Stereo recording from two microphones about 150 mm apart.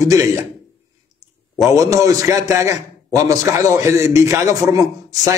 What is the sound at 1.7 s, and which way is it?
A man's voice, 20° right (ahead or behind).